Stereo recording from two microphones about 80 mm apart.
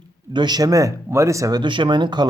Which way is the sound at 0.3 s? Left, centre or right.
Right.